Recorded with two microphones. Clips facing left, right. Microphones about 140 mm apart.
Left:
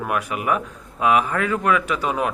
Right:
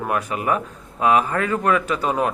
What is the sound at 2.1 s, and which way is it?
Speech, 35° right (ahead or behind).